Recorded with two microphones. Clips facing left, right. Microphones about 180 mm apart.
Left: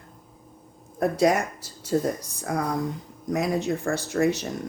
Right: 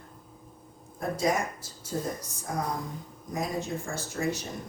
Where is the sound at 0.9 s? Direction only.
70° left (ahead or behind).